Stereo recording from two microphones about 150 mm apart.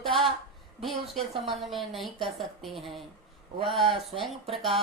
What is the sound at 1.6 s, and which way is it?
A woman's voice, centre (ahead or behind).